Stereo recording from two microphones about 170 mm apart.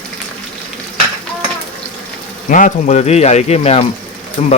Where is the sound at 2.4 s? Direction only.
50° left (ahead or behind).